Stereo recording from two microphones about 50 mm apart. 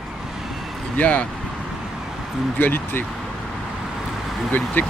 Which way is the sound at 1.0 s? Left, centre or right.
Left.